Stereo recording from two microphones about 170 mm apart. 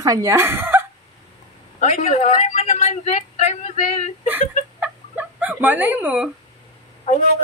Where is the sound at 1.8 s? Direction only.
45° left (ahead or behind).